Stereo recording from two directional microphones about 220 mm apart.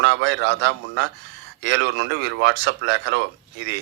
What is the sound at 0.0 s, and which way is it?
Speech, 55° right (ahead or behind).